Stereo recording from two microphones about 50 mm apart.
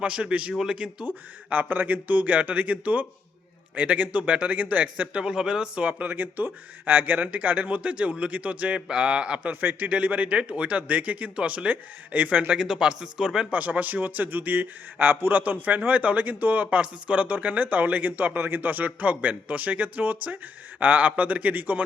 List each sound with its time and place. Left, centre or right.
0.0 s speech: right
1.0 s a man's voice: right; by 5.8 s centre
5.8 s a man's voice: right
9.5 s a man's voice: right
12.5 s speech: centre
13.5 s a man's voice: right
16.6 s a man's voice: right